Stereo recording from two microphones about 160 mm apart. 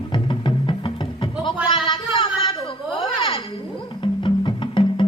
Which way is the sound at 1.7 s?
30° left (ahead or behind).